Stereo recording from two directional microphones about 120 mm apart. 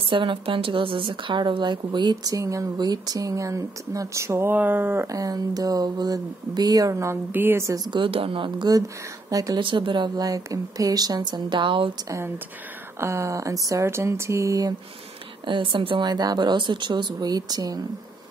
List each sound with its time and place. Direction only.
0.0 s a woman's voice: 45° right (ahead or behind)
2.3 s speech: 25° right (ahead or behind)
9.6 s speech: 45° right (ahead or behind)
12.0 s speech: 25° right (ahead or behind)
15.4 s speech: 45° right (ahead or behind)